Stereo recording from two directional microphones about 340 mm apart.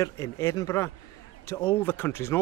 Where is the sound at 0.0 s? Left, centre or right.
Centre.